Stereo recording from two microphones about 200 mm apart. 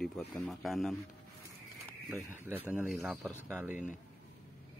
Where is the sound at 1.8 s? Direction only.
10° right (ahead or behind).